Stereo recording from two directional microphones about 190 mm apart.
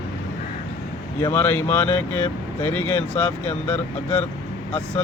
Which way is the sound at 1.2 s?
15° left (ahead or behind).